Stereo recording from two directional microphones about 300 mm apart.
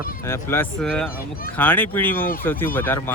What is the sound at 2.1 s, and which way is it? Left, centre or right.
Speech, left.